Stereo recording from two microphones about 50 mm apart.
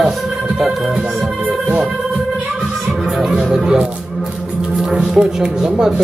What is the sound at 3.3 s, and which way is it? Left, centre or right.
Speech, centre.